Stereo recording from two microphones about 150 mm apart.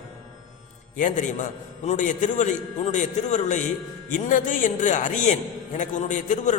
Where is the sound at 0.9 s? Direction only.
55° left (ahead or behind).